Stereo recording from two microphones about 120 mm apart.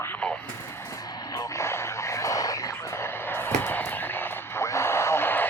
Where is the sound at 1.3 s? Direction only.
25° left (ahead or behind).